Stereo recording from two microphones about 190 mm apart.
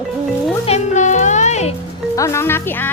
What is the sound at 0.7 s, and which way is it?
Speech, 40° left (ahead or behind).